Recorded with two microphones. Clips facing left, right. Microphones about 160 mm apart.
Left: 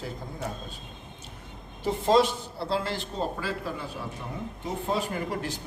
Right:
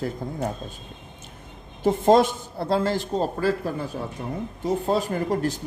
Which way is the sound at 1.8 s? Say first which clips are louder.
Right 5 dB; 50° right (ahead or behind).